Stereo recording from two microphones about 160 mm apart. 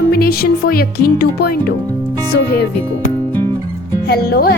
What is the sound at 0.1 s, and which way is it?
Music, 70° left (ahead or behind).